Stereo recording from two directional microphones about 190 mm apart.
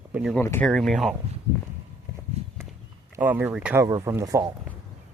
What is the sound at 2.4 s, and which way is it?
Walk, 35° right (ahead or behind).